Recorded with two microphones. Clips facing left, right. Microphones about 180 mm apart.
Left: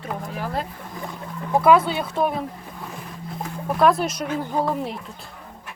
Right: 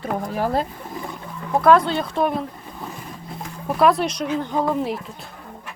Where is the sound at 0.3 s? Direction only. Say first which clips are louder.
Right 7 dB; 40° right (ahead or behind).